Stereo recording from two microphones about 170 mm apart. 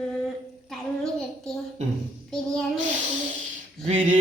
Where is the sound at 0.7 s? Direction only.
5° left (ahead or behind).